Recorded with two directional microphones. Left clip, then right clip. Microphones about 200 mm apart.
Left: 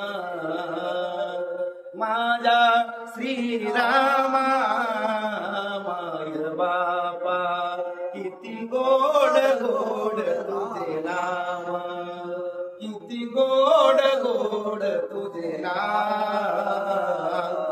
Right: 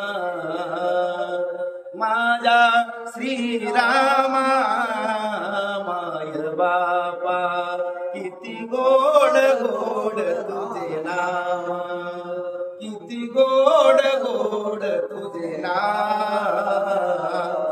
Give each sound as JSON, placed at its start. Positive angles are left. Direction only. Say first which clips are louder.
{"t": 0.8, "sound": "mantra", "louder": "right 7 dB", "side_deg": -15}
{"t": 3.3, "sound": "music", "louder": "right 2 dB", "side_deg": -15}
{"t": 6.6, "sound": "mantra", "louder": "right 4 dB", "side_deg": -15}
{"t": 8.7, "sound": "music", "louder": "right 4 dB", "side_deg": -15}
{"t": 9.2, "sound": "a sound", "louder": "right 3 dB", "side_deg": -15}
{"t": 10.0, "sound": "mantra", "louder": "right 2 dB", "side_deg": -15}
{"t": 13.4, "sound": "mantra", "louder": "right 3 dB", "side_deg": -15}